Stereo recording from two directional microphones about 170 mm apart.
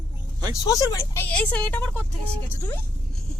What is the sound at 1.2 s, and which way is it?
Speech, 10° left (ahead or behind).